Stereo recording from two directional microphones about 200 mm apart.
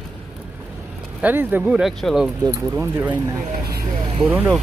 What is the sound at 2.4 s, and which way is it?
Speech, 10° right (ahead or behind).